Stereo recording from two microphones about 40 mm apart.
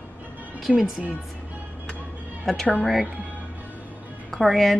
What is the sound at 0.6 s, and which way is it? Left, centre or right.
Speech, centre.